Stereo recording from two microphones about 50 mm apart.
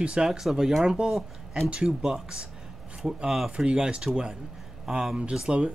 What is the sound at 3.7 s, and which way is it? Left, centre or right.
Speech, right.